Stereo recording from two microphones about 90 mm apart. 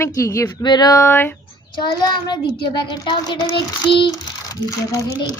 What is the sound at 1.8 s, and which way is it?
A child's voice, 55° left (ahead or behind).